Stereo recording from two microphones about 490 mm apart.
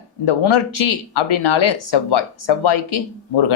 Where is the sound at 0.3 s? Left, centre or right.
Left.